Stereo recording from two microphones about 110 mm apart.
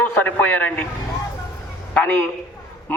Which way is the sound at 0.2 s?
15° left (ahead or behind).